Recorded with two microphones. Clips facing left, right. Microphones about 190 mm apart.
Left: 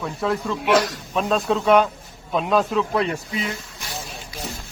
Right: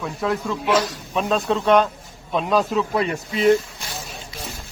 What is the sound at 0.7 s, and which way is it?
Speech, 65° left (ahead or behind).